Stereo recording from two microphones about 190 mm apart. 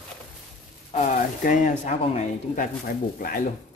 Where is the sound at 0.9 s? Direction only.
40° left (ahead or behind).